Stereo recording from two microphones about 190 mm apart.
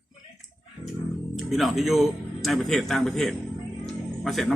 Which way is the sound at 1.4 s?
Centre (ahead or behind).